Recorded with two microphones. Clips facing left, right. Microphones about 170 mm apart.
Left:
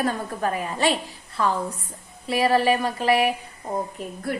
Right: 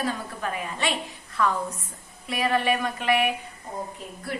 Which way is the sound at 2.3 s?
30° left (ahead or behind).